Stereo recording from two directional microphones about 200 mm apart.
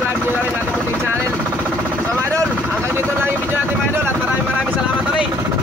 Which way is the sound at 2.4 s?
5° left (ahead or behind).